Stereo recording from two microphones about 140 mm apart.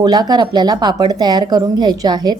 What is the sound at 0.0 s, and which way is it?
A woman's voice, 30° right (ahead or behind).